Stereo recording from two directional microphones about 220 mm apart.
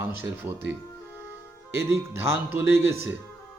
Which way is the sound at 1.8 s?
10° right (ahead or behind).